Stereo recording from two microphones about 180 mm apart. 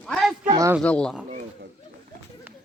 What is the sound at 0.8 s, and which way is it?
Speech, 5° left (ahead or behind).